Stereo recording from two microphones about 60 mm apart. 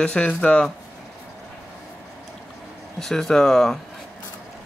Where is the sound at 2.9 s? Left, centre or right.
Centre.